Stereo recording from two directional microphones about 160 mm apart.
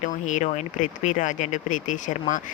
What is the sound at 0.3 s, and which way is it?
Speech, 50° left (ahead or behind).